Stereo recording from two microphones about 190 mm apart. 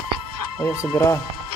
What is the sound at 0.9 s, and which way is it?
Speech, 15° left (ahead or behind).